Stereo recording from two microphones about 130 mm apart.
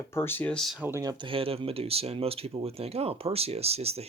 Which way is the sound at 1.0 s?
35° right (ahead or behind).